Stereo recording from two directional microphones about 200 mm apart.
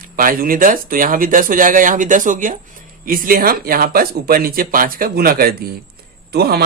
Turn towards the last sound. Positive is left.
turn(degrees=-50)  # may be behind; listen again after turning